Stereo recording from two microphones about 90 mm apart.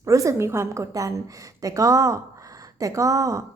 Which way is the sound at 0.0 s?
35° right (ahead or behind).